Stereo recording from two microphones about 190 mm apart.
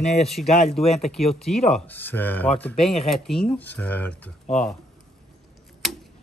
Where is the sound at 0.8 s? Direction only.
35° left (ahead or behind).